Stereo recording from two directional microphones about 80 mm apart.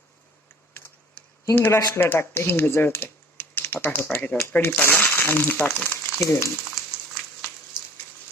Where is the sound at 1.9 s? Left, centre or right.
Left.